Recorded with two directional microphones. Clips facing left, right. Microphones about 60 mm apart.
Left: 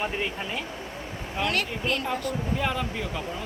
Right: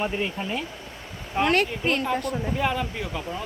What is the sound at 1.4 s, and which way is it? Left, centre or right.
Speech, right.